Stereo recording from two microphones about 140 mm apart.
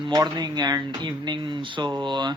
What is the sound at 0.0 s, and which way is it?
Speech, 30° right (ahead or behind).